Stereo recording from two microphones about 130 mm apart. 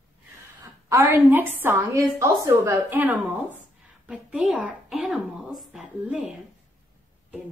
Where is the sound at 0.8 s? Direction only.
20° right (ahead or behind).